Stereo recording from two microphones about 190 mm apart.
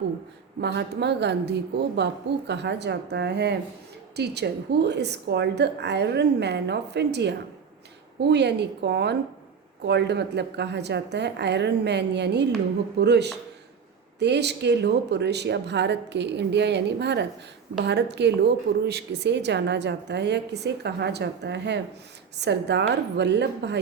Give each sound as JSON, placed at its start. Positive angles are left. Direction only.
{"t": 0.6, "sound": "a woman's voice", "side_deg": -65}